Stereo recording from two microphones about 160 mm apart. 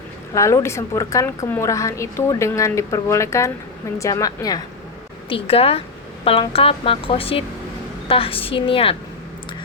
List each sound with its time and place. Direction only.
0.3 s a woman's voice: 20° left (ahead or behind)
5.3 s a woman's voice: 35° left (ahead or behind)